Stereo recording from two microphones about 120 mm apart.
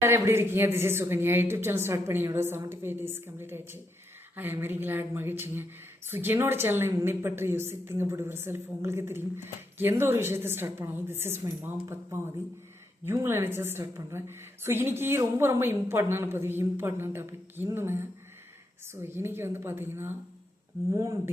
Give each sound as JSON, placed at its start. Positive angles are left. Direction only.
{"t": 0.0, "sound": "a woman's voice", "side_deg": -20}